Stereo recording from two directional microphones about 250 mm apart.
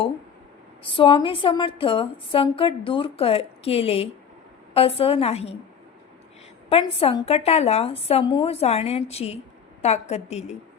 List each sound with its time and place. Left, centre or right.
0.9 s a woman's voice: left
6.7 s a woman's voice: left